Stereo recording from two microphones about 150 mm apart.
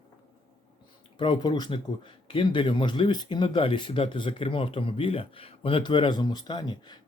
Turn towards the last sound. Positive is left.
turn(degrees=30)  # may be behind; listen again after turning